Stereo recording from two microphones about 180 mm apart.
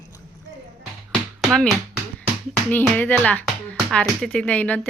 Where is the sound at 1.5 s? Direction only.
Centre (ahead or behind).